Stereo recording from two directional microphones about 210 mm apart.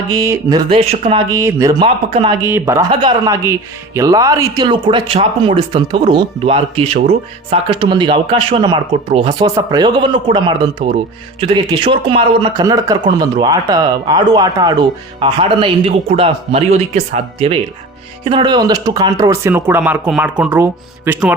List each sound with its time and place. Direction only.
0.1 s speech: 15° right (ahead or behind)
1.3 s speech: 15° right (ahead or behind)
2.9 s speech: 25° right (ahead or behind); by 21.3 s 5° right (ahead or behind)